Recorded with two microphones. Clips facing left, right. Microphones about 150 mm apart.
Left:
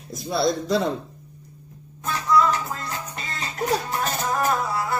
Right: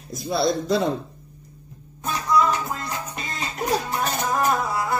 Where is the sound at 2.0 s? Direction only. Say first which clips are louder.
Left 1 dB; 15° right (ahead or behind).